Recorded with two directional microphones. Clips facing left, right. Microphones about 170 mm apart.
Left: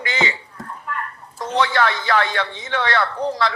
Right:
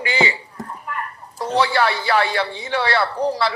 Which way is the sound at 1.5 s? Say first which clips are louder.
Right 1 dB; 10° right (ahead or behind).